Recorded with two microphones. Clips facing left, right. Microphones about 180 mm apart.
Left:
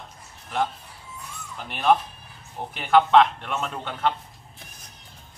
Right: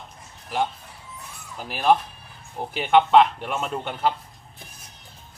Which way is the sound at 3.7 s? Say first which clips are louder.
Right 4 dB; 15° right (ahead or behind).